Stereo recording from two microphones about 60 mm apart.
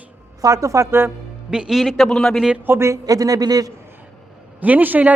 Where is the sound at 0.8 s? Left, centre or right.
Right.